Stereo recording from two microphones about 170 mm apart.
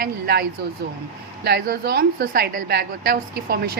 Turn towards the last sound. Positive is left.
turn(degrees=-70)  # may be behind; listen again after turning